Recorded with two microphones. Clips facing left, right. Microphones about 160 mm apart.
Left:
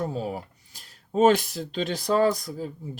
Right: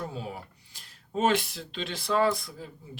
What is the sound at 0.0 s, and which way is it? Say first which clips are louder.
Speech: left 7 dB; 40° left (ahead or behind).